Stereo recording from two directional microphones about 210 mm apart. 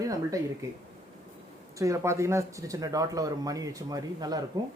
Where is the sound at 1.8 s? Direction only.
15° right (ahead or behind).